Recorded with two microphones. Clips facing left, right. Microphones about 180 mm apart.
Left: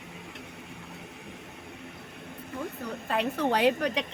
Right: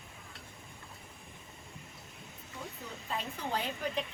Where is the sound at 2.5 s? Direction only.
65° left (ahead or behind).